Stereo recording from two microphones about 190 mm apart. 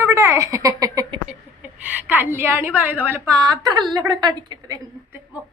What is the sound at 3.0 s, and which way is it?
A woman's voice, 15° right (ahead or behind).